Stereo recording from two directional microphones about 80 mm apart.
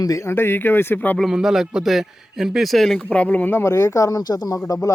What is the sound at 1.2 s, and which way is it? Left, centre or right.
A man's voice, centre.